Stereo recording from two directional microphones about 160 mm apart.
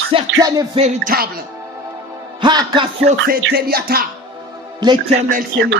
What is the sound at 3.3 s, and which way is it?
Music, 70° right (ahead or behind).